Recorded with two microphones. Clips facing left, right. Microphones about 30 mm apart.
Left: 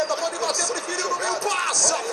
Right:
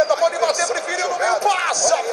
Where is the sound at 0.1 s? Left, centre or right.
Right.